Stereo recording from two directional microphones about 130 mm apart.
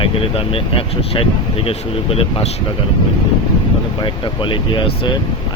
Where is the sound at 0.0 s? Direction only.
45° left (ahead or behind).